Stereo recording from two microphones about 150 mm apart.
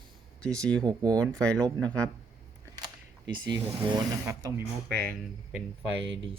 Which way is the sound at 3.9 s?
25° right (ahead or behind).